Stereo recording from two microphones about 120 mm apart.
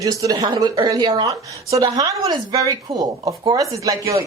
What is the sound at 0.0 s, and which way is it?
Speech, 30° right (ahead or behind).